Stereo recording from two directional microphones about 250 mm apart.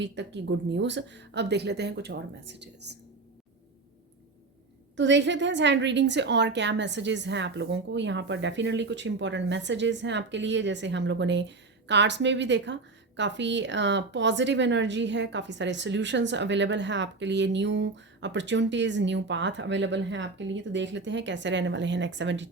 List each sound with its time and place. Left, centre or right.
0.0 s a woman's voice: right
4.9 s a woman's voice: right